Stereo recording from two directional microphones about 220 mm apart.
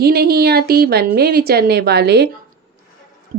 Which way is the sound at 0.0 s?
45° right (ahead or behind).